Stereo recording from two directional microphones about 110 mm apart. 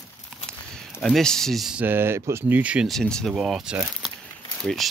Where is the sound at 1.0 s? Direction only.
5° left (ahead or behind).